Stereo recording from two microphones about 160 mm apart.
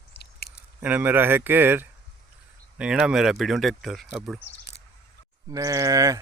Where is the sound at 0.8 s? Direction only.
10° right (ahead or behind).